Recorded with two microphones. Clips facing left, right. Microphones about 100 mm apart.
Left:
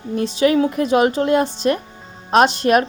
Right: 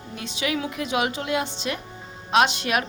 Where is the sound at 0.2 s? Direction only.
40° left (ahead or behind).